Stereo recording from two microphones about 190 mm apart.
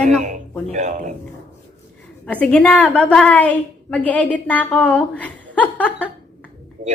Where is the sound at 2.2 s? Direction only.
5° left (ahead or behind).